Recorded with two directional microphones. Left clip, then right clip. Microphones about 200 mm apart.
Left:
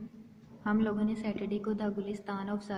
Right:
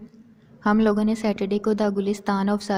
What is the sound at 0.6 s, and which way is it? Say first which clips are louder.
A woman's voice: right 11 dB; 45° right (ahead or behind).